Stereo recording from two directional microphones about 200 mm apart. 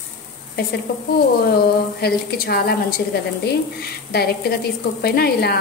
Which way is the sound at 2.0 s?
50° left (ahead or behind).